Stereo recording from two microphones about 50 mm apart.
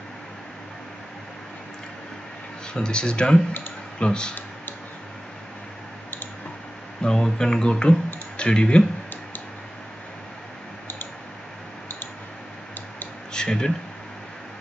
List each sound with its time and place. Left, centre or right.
2.7 s speech: centre
7.0 s speech: centre
13.3 s a sound: centre